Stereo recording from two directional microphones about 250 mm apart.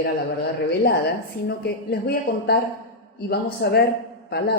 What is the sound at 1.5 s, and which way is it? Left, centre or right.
Speech, left.